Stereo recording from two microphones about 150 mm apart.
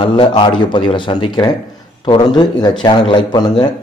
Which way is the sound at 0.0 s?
35° left (ahead or behind).